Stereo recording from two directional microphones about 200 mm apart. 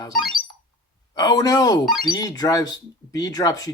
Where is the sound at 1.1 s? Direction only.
20° left (ahead or behind).